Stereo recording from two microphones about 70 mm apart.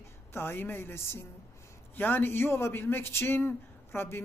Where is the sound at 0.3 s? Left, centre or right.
Left.